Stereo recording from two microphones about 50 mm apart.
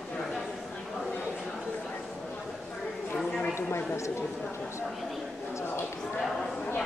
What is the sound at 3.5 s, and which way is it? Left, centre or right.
Speech, left.